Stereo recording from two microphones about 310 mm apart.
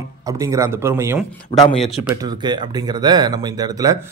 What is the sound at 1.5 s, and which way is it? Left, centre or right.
Speech, centre.